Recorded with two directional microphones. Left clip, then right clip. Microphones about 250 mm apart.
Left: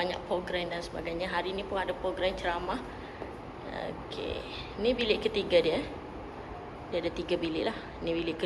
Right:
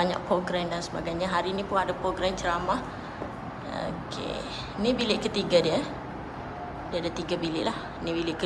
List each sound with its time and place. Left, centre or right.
0.0 s speech: right
6.9 s speech: centre